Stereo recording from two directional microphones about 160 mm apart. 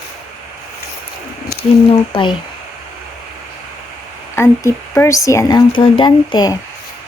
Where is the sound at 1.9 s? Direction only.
30° left (ahead or behind).